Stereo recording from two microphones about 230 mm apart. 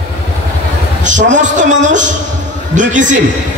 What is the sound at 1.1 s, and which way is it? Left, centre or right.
A man's voice, right.